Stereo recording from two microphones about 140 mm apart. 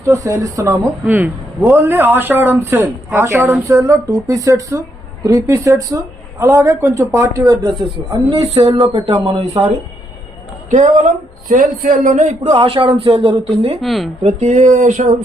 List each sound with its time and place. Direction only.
0.0 s a man's voice: 20° right (ahead or behind)
8.3 s speech: 40° right (ahead or behind)
10.7 s speech: 60° right (ahead or behind)
11.4 s a man's voice: 75° right (ahead or behind); by 12.5 s 60° right (ahead or behind)
12.5 s speech: 40° right (ahead or behind)
13.8 s speech: centre (ahead or behind)
14.2 s speech: 50° right (ahead or behind)